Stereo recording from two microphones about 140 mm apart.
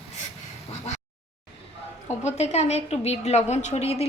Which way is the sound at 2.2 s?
50° left (ahead or behind).